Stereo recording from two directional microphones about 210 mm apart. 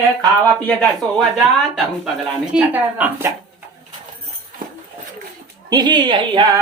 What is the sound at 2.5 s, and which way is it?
Speech, 5° right (ahead or behind).